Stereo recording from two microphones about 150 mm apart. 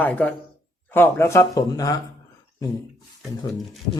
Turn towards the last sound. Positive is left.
turn(degrees=0)  # may be behind; listen again after turning